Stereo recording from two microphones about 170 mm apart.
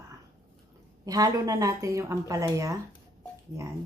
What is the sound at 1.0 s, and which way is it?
Speech, 20° right (ahead or behind).